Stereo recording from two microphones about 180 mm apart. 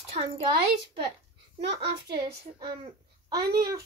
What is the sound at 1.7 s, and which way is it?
A child's voice, 30° right (ahead or behind).